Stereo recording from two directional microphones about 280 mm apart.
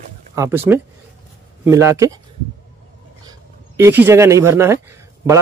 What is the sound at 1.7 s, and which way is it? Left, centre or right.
Speech, centre.